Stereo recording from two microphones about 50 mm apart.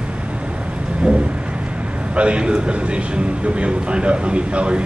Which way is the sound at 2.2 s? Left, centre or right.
Right.